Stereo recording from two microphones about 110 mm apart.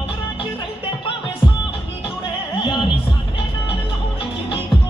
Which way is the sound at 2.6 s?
45° left (ahead or behind).